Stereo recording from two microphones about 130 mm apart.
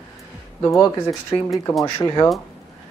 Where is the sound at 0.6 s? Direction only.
25° left (ahead or behind).